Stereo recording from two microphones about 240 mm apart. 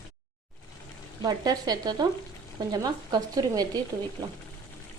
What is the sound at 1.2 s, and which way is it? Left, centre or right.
Speech, centre.